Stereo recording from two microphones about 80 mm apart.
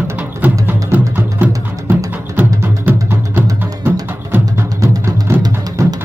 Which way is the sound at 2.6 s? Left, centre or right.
Right.